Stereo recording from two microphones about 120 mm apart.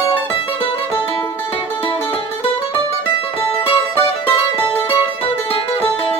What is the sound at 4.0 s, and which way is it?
Music, 15° left (ahead or behind).